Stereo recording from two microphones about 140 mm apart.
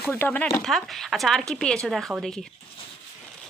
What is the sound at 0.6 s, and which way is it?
Speech, centre (ahead or behind).